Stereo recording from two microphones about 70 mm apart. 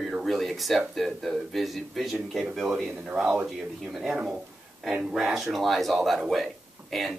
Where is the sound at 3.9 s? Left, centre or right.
Centre.